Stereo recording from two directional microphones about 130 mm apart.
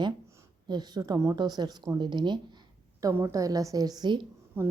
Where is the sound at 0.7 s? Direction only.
30° right (ahead or behind).